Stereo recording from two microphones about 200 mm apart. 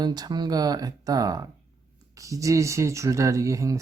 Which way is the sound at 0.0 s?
20° right (ahead or behind).